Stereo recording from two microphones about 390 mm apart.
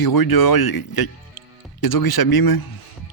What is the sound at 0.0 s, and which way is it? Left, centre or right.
Speech, left.